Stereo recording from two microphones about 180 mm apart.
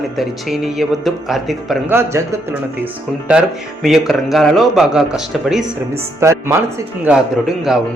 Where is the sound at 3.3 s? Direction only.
5° right (ahead or behind).